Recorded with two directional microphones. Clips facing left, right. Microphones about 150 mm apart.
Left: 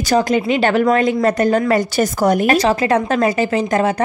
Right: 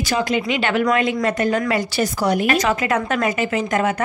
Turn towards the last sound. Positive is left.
turn(degrees=35)  # may be behind; listen again after turning